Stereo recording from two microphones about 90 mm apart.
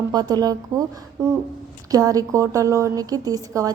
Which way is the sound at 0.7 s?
35° right (ahead or behind).